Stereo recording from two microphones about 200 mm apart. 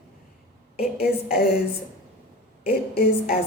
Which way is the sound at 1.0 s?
50° left (ahead or behind).